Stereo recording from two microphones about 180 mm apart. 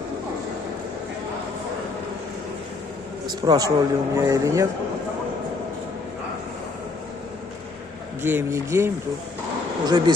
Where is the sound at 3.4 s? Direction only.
20° right (ahead or behind).